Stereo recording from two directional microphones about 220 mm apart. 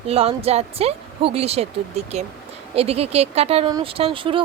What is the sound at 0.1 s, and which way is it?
A woman's voice, 25° right (ahead or behind).